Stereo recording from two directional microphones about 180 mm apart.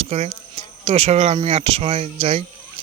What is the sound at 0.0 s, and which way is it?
Speech, 35° right (ahead or behind).